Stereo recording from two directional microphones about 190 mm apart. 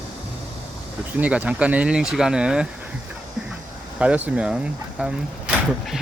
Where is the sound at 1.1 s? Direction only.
5° right (ahead or behind).